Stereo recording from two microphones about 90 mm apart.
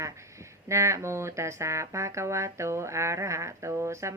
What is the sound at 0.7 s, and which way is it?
Speech, 35° right (ahead or behind).